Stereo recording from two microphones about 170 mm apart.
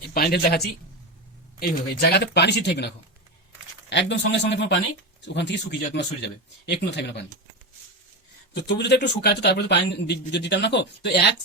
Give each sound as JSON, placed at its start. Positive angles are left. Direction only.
{"t": 0.1, "sound": "speech", "side_deg": 65}
{"t": 3.8, "sound": "speech", "side_deg": 90}
{"t": 8.5, "sound": "speech", "side_deg": 85}